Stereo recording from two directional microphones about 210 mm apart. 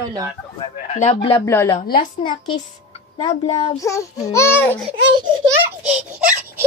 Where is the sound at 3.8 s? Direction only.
15° left (ahead or behind).